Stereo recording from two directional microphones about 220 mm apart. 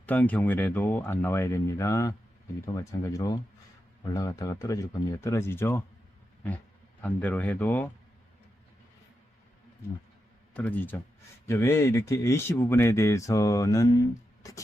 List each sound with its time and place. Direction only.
0.0 s speech: 5° left (ahead or behind)
7.0 s speech: 5° left (ahead or behind)
10.5 s speech: 10° left (ahead or behind)